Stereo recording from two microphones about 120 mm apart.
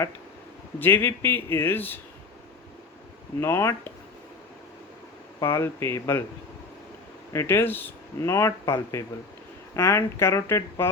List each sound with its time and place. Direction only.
0.8 s speech: 20° left (ahead or behind)
3.4 s speech: 25° left (ahead or behind)
5.4 s speech: 20° left (ahead or behind)
7.3 s speech: 20° left (ahead or behind)